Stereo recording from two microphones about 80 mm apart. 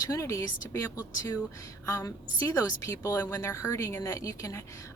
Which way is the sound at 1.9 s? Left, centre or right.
Left.